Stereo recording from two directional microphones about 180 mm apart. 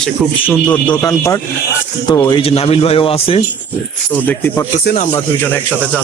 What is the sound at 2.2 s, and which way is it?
A man's voice, 30° left (ahead or behind).